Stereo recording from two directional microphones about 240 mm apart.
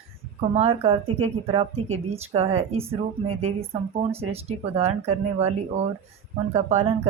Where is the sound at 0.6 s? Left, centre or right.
Right.